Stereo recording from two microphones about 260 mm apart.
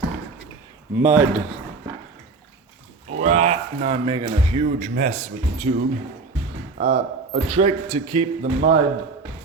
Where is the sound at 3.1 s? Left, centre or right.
Right.